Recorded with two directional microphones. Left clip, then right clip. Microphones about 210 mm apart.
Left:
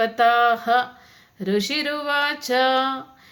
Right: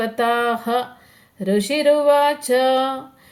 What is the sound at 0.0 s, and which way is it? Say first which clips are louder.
A woman's voice: left 2 dB; 10° left (ahead or behind).